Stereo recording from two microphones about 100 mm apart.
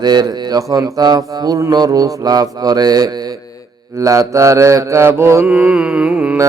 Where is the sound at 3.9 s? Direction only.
35° right (ahead or behind).